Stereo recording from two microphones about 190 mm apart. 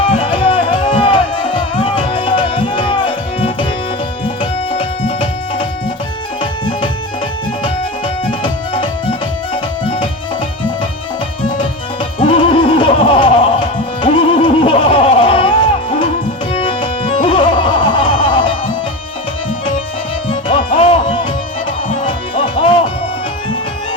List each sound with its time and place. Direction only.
0.0 s music: 25° left (ahead or behind)
4.7 s music: 25° left (ahead or behind)
11.4 s music: 25° left (ahead or behind)
17.2 s music: 25° left (ahead or behind)
20.3 s music: 25° left (ahead or behind)